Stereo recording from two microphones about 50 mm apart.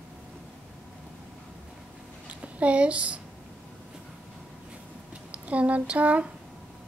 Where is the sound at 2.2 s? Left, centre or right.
Right.